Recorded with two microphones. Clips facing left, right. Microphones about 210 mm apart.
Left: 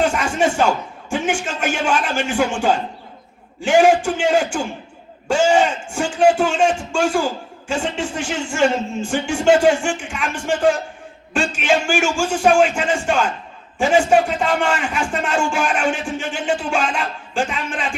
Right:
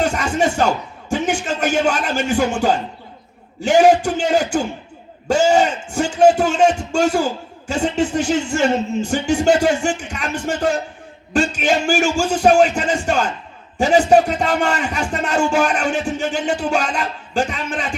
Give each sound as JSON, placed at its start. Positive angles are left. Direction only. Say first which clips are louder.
{"t": 0.0, "sound": "music", "louder": "even", "side_deg": -40}
{"t": 1.1, "sound": "a man's voice", "louder": "right 2 dB", "side_deg": -40}